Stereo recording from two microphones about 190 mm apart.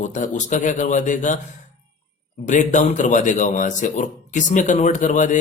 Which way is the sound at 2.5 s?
40° left (ahead or behind).